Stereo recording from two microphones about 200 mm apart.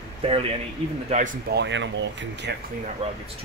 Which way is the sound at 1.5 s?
65° right (ahead or behind).